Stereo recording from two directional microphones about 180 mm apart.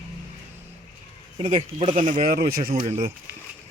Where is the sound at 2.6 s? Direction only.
35° right (ahead or behind).